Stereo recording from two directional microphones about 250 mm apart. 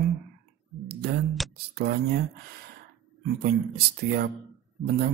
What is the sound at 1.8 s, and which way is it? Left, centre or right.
Speech, right.